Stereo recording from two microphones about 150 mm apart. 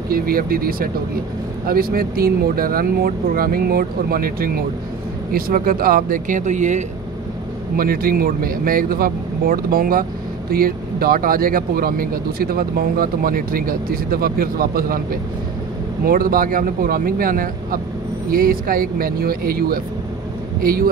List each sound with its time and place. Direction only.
0.1 s speech: 75° right (ahead or behind); by 6.8 s 50° right (ahead or behind)
7.7 s speech: 75° right (ahead or behind)